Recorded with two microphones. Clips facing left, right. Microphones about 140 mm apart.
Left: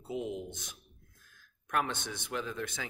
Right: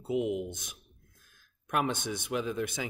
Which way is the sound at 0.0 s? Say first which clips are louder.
Right 6 dB; 15° right (ahead or behind).